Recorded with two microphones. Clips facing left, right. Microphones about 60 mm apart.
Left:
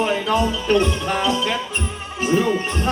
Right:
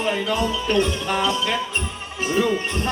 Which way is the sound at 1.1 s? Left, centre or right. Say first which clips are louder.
Right 1 dB; left.